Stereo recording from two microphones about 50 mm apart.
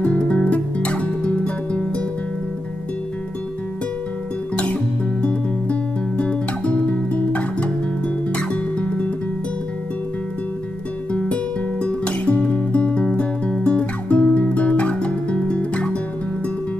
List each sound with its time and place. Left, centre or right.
0.0 s music: left
5.2 s music: left
11.8 s music: left